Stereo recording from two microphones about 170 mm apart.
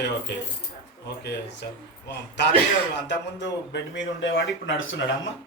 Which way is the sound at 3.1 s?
90° left.